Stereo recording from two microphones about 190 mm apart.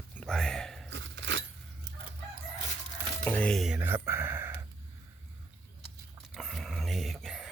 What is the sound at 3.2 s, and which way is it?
Speech, 5° left (ahead or behind).